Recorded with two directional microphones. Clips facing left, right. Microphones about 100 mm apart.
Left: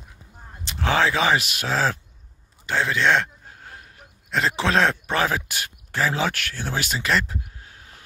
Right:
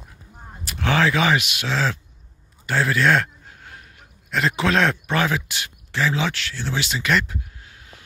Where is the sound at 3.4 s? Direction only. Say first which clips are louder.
Even; 35° left (ahead or behind).